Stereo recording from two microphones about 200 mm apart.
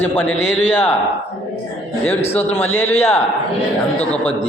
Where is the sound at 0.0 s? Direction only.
10° left (ahead or behind).